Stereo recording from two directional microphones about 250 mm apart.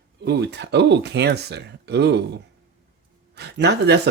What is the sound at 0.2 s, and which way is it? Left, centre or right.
Speech, right.